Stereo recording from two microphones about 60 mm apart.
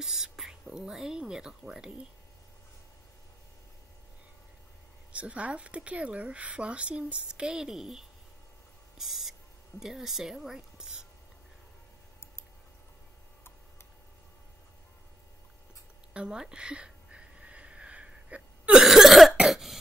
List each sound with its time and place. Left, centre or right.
0.0 s speech: centre
5.1 s a woman's voice: right; by 8.0 s centre
8.9 s owl: centre
9.8 s speech: centre
16.1 s a sound: centre
19.4 s cough: centre